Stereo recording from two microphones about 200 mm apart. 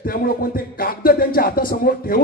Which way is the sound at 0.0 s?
45° left (ahead or behind).